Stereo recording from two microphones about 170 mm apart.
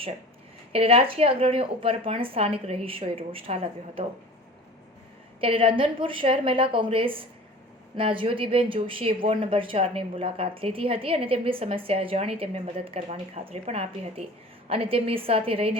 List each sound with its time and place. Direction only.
0.7 s a woman's voice: 35° right (ahead or behind)
5.4 s a woman's voice: 30° right (ahead or behind)